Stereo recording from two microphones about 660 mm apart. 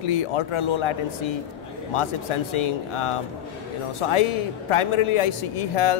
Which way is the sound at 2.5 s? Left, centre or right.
Left.